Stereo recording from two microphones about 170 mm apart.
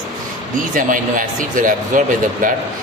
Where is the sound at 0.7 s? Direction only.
50° right (ahead or behind).